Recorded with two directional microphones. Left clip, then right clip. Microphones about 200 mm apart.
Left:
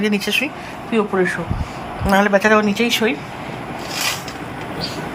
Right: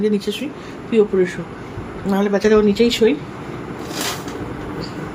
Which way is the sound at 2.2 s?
5° right (ahead or behind).